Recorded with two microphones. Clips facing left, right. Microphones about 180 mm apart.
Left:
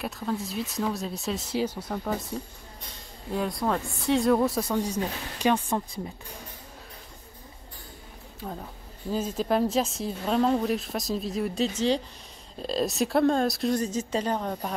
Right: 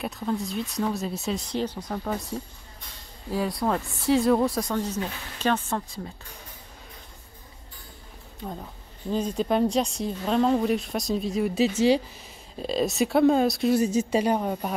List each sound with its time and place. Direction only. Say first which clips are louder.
0.0 s speech: right 2 dB; centre (ahead or behind)
8.4 s speech: right 1 dB; centre (ahead or behind)